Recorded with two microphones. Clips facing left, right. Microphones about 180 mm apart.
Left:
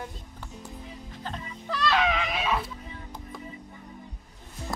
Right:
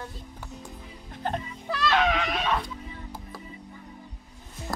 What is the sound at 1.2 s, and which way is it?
Music, 55° right (ahead or behind).